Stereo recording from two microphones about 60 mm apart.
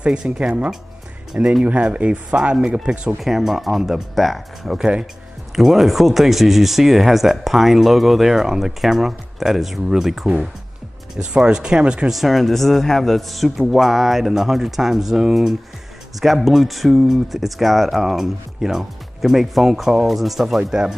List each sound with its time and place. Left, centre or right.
0.0 s speech: centre
1.6 s speech: centre
3.2 s speech: centre
11.3 s speech: centre
12.1 s speech: centre